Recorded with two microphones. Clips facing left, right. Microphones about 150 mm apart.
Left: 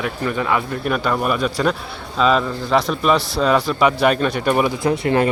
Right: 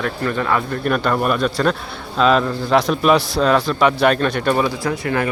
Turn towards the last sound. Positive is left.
turn(degrees=25)  # may be behind; listen again after turning